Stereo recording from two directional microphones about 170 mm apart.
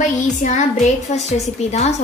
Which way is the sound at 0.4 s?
40° left (ahead or behind).